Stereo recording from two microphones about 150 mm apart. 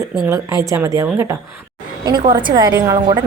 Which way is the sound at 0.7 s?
20° right (ahead or behind).